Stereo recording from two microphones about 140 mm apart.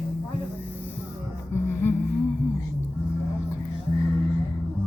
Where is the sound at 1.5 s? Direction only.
15° left (ahead or behind).